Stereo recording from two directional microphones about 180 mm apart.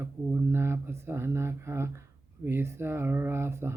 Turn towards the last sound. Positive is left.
turn(degrees=-15)  # may be behind; listen again after turning